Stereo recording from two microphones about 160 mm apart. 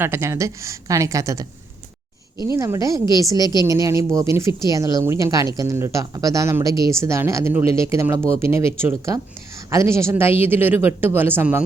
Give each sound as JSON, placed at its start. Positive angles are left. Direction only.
{"t": 0.0, "sound": "a woman's voice", "side_deg": -15}
{"t": 2.6, "sound": "a woman's voice", "side_deg": -20}